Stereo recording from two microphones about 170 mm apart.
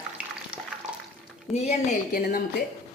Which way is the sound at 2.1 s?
60° left (ahead or behind).